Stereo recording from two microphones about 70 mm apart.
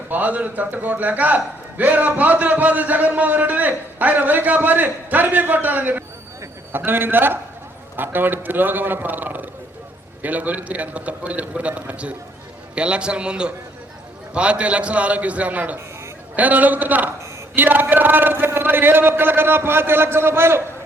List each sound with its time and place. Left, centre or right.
0.1 s a man's voice: right